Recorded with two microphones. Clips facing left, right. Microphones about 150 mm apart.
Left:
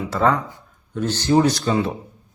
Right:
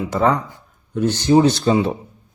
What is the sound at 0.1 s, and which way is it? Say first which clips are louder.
Speech: right 1 dB; 20° right (ahead or behind).